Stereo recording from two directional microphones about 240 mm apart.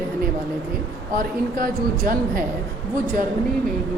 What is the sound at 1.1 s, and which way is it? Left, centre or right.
Speech, right.